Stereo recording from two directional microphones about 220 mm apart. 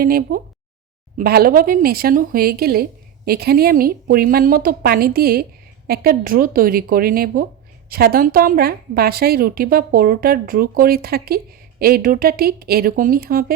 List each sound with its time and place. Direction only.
0.0 s a woman's voice: 40° right (ahead or behind)